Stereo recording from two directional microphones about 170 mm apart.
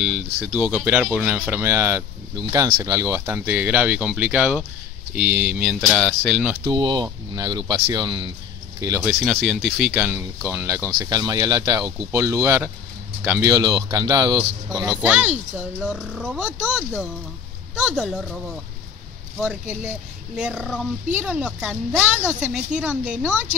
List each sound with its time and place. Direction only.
0.0 s speech: 5° right (ahead or behind)
6.7 s speech: 25° right (ahead or behind)
9.0 s speech: centre (ahead or behind); by 14.8 s 20° right (ahead or behind)
15.0 s speech: 10° right (ahead or behind)
17.7 s speech: 5° right (ahead or behind)